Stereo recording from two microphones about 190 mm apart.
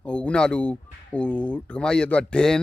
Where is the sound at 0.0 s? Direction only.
5° left (ahead or behind).